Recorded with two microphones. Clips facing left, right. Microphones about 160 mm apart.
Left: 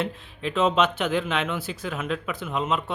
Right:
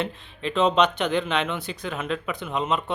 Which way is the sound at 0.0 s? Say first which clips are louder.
Even; 5° left (ahead or behind).